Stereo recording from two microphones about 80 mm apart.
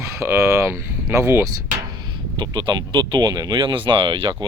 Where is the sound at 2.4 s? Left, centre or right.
Right.